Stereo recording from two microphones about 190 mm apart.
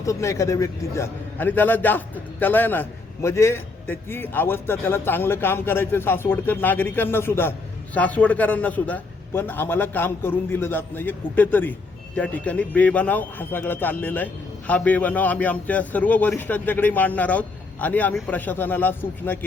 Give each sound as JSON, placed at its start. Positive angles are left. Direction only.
{"t": 0.0, "sound": "a man's voice", "side_deg": 15}